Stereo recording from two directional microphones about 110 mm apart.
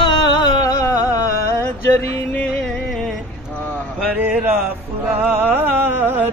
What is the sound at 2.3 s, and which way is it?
Music, 15° left (ahead or behind).